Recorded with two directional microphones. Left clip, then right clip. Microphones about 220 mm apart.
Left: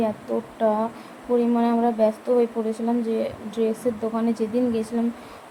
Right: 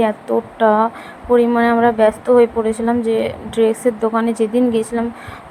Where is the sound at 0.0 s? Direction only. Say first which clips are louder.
Right 8 dB; 20° right (ahead or behind).